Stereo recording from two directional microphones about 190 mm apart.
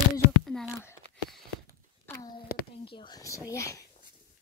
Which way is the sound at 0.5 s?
5° left (ahead or behind).